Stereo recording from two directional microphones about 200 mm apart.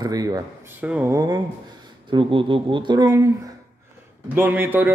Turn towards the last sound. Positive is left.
turn(degrees=-10)  # may be behind; listen again after turning